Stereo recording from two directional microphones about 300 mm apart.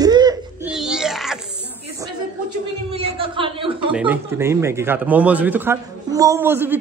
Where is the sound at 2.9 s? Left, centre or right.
Centre.